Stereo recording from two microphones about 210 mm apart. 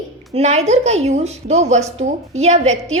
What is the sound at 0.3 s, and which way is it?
A woman's voice, 30° right (ahead or behind).